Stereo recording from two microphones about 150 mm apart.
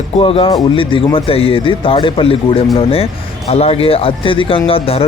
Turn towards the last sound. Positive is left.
turn(degrees=40)  # may be behind; listen again after turning